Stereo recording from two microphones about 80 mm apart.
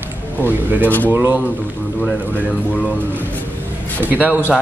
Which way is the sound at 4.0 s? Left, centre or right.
Right.